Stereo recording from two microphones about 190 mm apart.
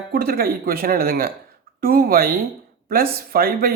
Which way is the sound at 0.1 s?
50° right (ahead or behind).